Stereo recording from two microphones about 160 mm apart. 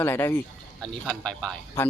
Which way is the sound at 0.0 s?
15° left (ahead or behind).